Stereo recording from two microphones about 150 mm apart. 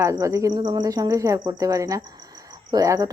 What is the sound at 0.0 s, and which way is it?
Speech, 20° right (ahead or behind).